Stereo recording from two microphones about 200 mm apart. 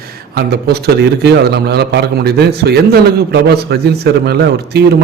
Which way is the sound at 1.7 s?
55° right (ahead or behind).